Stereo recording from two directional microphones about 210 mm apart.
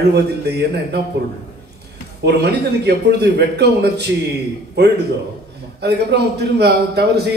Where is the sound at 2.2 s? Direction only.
50° right (ahead or behind).